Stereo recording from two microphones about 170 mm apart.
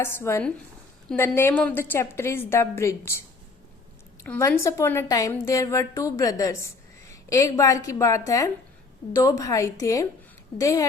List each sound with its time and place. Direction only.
0.0 s a woman's voice: 15° left (ahead or behind)
4.2 s a woman's voice: 15° left (ahead or behind)